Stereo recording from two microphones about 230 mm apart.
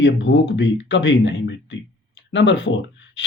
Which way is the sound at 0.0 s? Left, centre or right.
Left.